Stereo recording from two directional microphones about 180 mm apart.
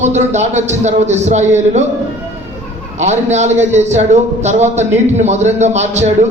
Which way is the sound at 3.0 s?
40° right (ahead or behind).